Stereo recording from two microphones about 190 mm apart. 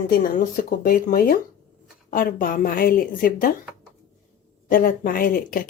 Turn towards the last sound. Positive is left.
turn(degrees=50)  # may be behind; listen again after turning